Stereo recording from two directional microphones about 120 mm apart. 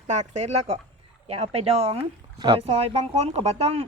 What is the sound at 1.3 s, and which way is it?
Speech, 55° right (ahead or behind).